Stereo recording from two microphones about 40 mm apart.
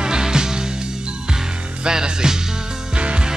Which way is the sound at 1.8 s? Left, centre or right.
Centre.